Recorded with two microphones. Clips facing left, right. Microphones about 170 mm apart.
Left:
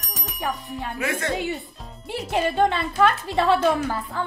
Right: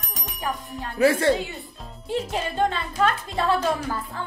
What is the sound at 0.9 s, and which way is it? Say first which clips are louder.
Speech: right 10 dB; 30° right (ahead or behind).